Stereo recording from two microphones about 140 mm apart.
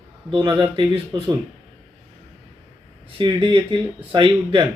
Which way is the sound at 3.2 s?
35° right (ahead or behind).